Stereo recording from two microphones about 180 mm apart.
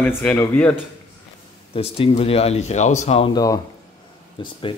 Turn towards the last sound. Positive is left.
turn(degrees=30)  # may be behind; listen again after turning